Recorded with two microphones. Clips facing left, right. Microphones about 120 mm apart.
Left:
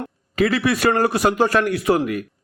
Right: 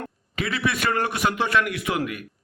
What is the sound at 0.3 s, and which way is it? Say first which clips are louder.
A man's voice: left 7 dB; 40° left (ahead or behind).